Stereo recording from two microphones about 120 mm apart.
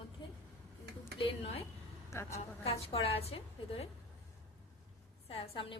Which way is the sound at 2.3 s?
55° left (ahead or behind).